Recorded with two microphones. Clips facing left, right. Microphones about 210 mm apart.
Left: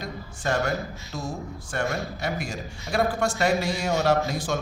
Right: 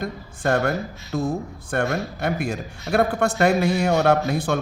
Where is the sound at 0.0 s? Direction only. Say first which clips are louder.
Right 5 dB; 55° right (ahead or behind).